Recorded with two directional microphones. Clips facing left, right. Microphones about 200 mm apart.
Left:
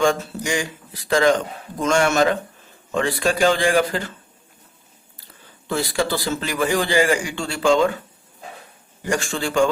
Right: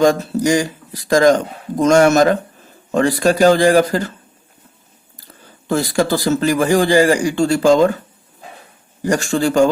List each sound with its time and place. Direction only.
0.0 s speech: 40° right (ahead or behind)
5.6 s speech: 45° right (ahead or behind)
9.0 s speech: 40° right (ahead or behind)